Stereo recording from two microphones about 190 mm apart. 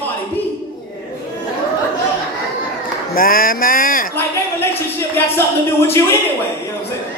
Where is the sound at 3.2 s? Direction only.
50° left (ahead or behind).